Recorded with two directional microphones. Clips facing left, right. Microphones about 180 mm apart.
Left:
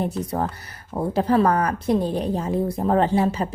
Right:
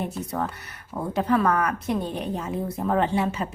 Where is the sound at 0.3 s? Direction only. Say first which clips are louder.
Left 3 dB; 35° left (ahead or behind).